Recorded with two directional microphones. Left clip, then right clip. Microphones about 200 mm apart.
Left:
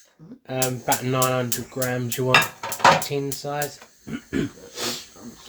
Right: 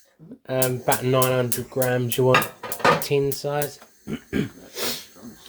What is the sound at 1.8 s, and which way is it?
Dishes, 30° right (ahead or behind).